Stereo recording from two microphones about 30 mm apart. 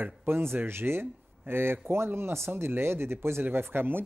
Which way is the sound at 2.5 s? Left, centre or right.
Right.